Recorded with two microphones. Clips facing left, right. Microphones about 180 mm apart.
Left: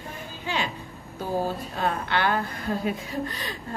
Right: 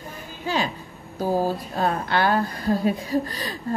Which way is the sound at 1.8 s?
40° right (ahead or behind).